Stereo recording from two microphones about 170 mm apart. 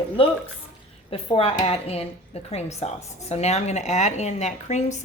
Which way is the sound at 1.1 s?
35° left (ahead or behind).